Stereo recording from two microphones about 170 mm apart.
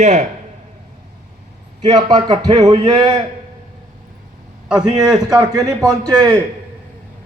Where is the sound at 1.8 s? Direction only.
25° right (ahead or behind).